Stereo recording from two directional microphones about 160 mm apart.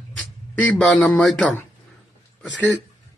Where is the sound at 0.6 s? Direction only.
5° left (ahead or behind).